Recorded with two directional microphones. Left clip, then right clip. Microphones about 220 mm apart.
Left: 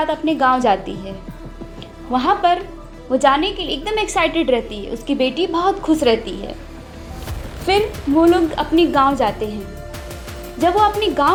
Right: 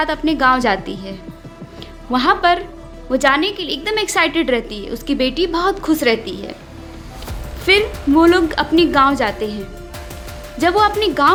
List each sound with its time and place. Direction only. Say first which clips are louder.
0.0 s a woman's voice: right 1 dB; 15° right (ahead or behind)
2.1 s a woman's voice: right 1 dB; 15° right (ahead or behind)
7.6 s a woman's voice: right 3 dB; 15° right (ahead or behind)
10.6 s a woman's voice: right 1 dB; 15° right (ahead or behind)